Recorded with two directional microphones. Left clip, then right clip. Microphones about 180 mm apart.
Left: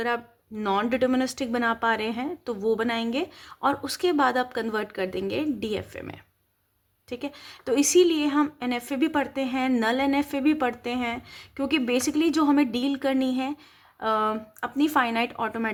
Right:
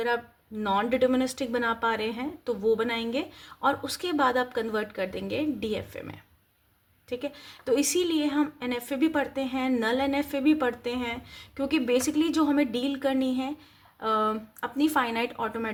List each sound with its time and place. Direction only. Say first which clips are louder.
0.6 s speech: even; 35° left (ahead or behind)